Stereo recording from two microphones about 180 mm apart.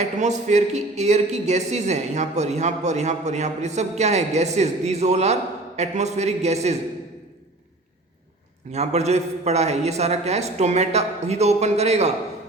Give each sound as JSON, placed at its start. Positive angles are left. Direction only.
{"t": 0.0, "sound": "speech", "side_deg": -40}
{"t": 8.7, "sound": "speech", "side_deg": -35}